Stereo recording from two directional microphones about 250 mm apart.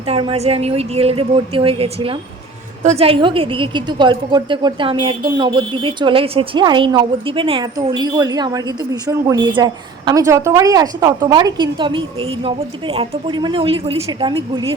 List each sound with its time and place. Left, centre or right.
0.0 s a woman's voice: right